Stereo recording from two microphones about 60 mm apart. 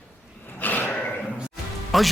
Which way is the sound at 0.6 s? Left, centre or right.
Left.